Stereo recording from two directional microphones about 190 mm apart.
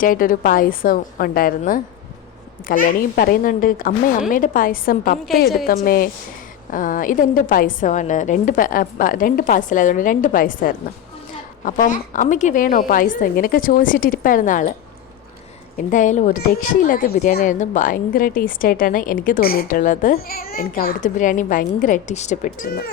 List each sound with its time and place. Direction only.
0.0 s a woman's voice: 45° left (ahead or behind)
15.9 s a woman's voice: 40° left (ahead or behind)